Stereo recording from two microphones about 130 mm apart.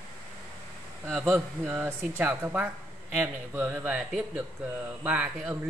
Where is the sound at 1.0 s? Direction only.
15° right (ahead or behind).